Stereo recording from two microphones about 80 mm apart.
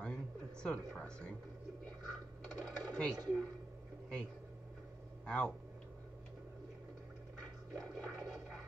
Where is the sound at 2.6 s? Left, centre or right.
Centre.